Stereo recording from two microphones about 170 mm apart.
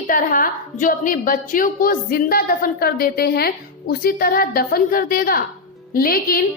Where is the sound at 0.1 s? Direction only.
55° left (ahead or behind).